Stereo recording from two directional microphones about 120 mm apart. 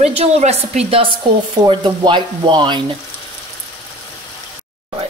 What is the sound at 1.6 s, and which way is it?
Speech, 40° right (ahead or behind).